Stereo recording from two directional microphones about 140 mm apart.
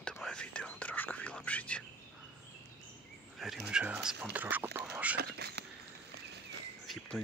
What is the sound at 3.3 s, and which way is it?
Speech, centre (ahead or behind).